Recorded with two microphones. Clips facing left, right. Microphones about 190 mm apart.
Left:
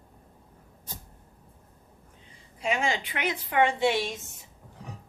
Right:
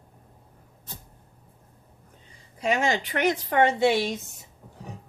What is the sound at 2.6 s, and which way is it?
Speech, 40° right (ahead or behind).